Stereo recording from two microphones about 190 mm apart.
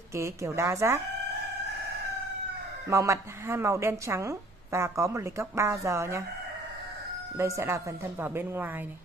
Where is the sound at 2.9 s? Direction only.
15° right (ahead or behind).